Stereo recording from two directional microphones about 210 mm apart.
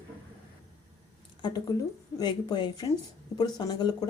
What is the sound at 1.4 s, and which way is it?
Speech, 20° left (ahead or behind).